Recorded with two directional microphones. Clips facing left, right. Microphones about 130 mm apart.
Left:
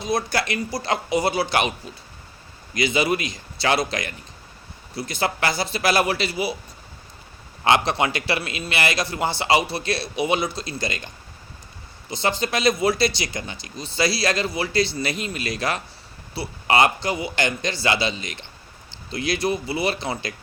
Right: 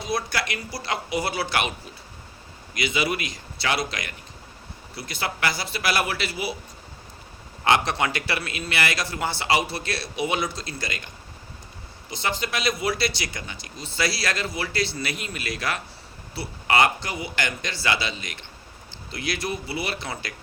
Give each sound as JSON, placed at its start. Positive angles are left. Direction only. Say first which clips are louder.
{"t": 0.3, "sound": "a man's voice", "louder": "left 5 dB", "side_deg": 30}
{"t": 2.8, "sound": "a man's voice", "louder": "left 4 dB", "side_deg": 30}
{"t": 5.2, "sound": "a man's voice", "louder": "left 4 dB", "side_deg": 25}
{"t": 7.6, "sound": "a man's voice", "louder": "left 2 dB", "side_deg": 25}
{"t": 12.1, "sound": "a man's voice", "louder": "left 4 dB", "side_deg": 30}